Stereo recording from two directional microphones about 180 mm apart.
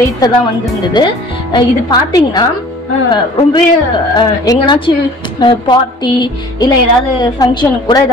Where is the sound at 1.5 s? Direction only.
25° left (ahead or behind).